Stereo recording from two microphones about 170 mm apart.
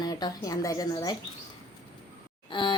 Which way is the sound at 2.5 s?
30° left (ahead or behind).